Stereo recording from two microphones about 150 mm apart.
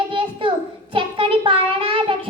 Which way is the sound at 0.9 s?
35° right (ahead or behind).